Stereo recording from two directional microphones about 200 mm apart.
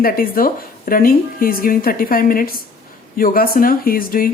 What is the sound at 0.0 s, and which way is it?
A woman's voice, 45° left (ahead or behind).